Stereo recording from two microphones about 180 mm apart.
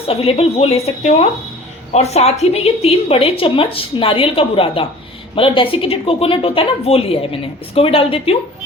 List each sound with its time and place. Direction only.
0.1 s a woman's voice: 35° left (ahead or behind)